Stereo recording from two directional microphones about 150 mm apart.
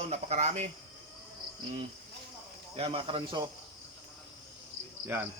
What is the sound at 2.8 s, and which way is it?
Speech, 35° right (ahead or behind).